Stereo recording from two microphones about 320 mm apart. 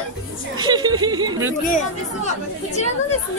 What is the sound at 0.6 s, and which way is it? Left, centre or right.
Music, centre.